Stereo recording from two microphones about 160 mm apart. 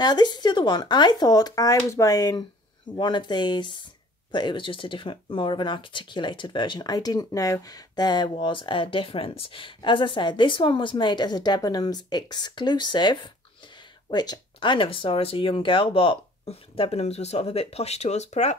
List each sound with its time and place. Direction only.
0.0 s speech: 25° left (ahead or behind); by 18.6 s 45° left (ahead or behind)